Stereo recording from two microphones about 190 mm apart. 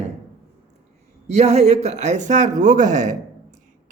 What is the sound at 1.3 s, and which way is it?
A man's voice, 35° right (ahead or behind).